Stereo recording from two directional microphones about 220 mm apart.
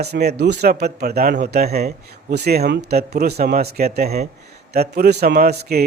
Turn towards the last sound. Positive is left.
turn(degrees=-45)  # may be behind; listen again after turning